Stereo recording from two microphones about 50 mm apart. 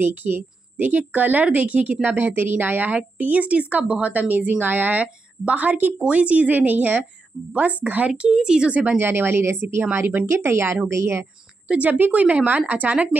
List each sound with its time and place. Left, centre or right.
0.0 s a woman's voice: right
5.0 s a woman's voice: right
8.1 s speech: centre
9.0 s a woman's voice: right
10.3 s speech: right
11.8 s a woman's voice: right
12.1 s a woman's voice: right